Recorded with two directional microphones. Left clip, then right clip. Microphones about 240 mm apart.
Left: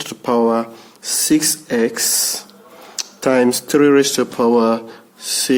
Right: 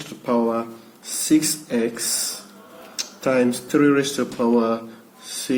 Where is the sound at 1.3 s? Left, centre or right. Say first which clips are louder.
Left 2 dB; left.